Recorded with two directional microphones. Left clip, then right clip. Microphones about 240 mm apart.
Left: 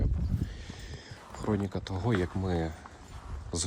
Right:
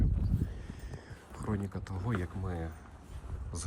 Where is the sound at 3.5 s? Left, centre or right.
Centre.